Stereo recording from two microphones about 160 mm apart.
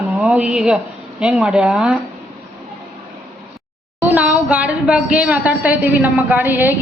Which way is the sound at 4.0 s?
10° right (ahead or behind).